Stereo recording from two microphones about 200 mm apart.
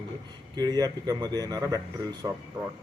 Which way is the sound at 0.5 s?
20° right (ahead or behind).